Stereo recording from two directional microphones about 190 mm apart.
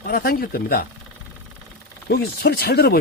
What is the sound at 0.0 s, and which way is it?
Speech, 50° left (ahead or behind).